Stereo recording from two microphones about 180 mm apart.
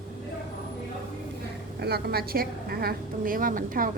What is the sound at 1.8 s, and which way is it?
A woman's voice, 60° right (ahead or behind).